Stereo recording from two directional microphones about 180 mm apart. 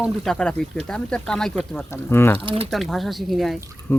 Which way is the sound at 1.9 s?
15° left (ahead or behind).